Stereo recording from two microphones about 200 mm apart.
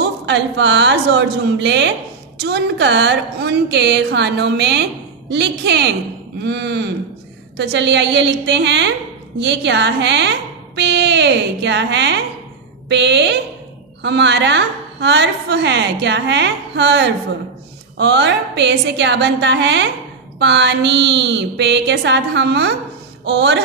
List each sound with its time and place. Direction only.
0.0 s a woman's voice: 60° right (ahead or behind)